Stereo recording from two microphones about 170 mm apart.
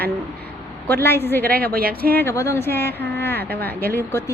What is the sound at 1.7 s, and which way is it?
Speech, 60° right (ahead or behind).